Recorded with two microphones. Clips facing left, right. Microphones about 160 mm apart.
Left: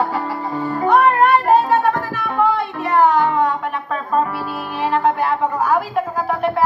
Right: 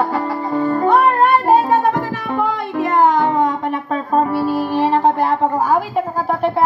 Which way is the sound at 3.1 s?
45° right (ahead or behind).